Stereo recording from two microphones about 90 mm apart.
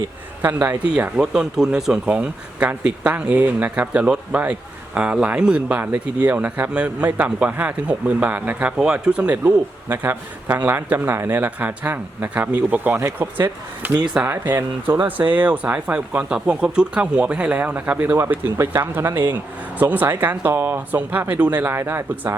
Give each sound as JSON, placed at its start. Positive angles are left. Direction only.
{"t": 0.4, "sound": "speech", "side_deg": -20}